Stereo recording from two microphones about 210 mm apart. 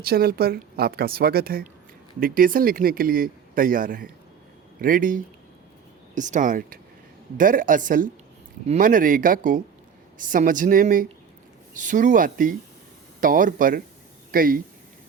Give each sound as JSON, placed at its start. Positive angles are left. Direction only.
{"t": 0.0, "sound": "speech", "side_deg": -45}